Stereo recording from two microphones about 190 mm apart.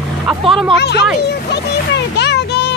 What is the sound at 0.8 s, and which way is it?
Speech, 60° left (ahead or behind).